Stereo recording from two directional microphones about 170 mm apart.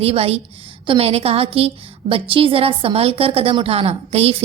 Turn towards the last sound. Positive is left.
turn(degrees=-35)  # may be behind; listen again after turning